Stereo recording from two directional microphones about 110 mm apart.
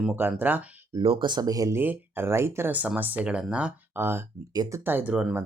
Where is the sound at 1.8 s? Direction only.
20° right (ahead or behind).